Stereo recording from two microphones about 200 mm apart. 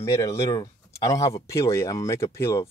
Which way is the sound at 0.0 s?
15° left (ahead or behind).